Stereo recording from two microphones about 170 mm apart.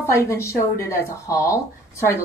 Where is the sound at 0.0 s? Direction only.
15° left (ahead or behind).